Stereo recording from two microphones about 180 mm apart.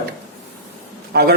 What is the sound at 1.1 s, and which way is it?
Speech, 60° right (ahead or behind).